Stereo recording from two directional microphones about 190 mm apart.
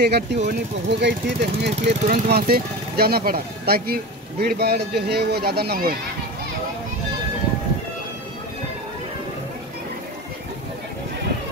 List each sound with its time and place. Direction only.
0.0 s speech: 60° right (ahead or behind)